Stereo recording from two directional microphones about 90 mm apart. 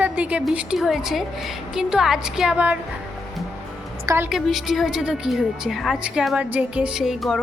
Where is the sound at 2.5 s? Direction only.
15° right (ahead or behind).